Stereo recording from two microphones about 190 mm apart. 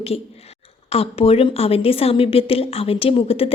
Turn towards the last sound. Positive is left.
turn(degrees=30)  # may be behind; listen again after turning